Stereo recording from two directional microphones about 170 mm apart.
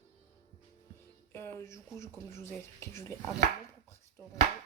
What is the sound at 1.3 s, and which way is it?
Chopping, 15° left (ahead or behind).